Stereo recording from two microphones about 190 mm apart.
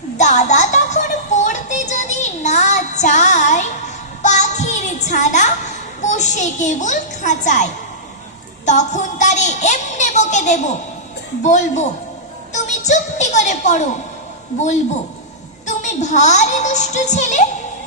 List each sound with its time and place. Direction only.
0.2 s music: 40° left (ahead or behind)
8.6 s a sound: 40° left (ahead or behind)
11.4 s speech: 40° left (ahead or behind)
12.5 s music: 40° left (ahead or behind)
15.6 s a child's voice: 40° left (ahead or behind)